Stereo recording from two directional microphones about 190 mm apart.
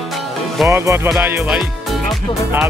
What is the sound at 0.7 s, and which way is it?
Speech, 15° right (ahead or behind).